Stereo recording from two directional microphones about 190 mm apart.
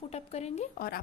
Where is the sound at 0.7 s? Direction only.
50° left (ahead or behind).